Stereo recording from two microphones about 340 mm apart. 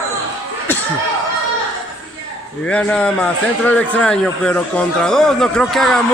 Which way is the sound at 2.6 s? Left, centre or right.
Centre.